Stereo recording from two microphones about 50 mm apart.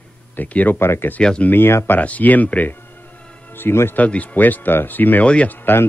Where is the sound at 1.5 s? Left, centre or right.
Left.